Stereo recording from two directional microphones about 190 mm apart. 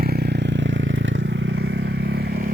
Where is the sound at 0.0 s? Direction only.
55° right (ahead or behind).